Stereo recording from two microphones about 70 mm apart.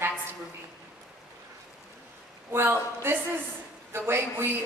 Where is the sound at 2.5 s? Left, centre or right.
Right.